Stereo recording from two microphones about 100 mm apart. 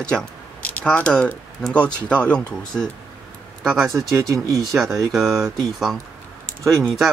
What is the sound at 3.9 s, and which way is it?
Speech, 30° right (ahead or behind).